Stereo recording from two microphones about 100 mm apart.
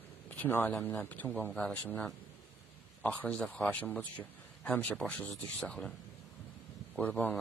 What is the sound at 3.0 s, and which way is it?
A man's voice, 15° left (ahead or behind).